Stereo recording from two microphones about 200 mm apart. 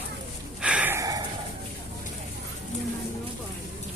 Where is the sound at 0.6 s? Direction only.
5° right (ahead or behind).